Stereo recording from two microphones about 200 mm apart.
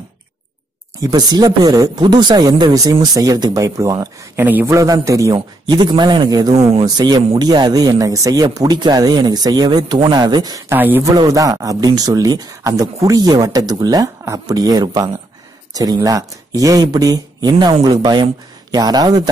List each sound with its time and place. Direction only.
1.0 s a man's voice: 20° right (ahead or behind)